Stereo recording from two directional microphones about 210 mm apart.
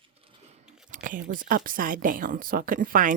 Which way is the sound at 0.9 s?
40° right (ahead or behind).